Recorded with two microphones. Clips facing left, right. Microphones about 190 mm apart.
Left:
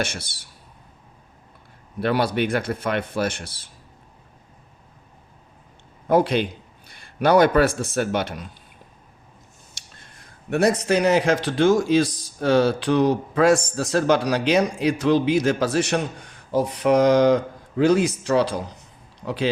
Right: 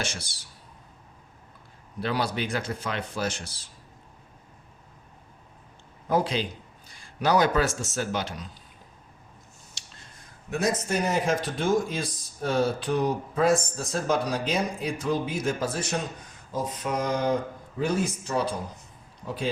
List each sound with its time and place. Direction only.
2.0 s a man's voice: 60° left (ahead or behind)
6.1 s a man's voice: 60° left (ahead or behind)
10.5 s speech: 70° left (ahead or behind); by 19.5 s 85° left